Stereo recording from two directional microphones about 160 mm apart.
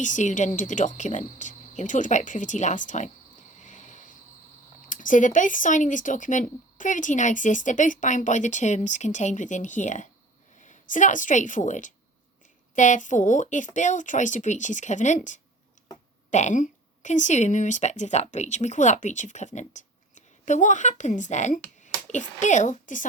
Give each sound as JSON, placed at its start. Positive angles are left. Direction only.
{"t": 0.0, "sound": "speech", "side_deg": 50}
{"t": 3.6, "sound": "cricket", "side_deg": 50}
{"t": 4.9, "sound": "a woman's voice", "side_deg": 55}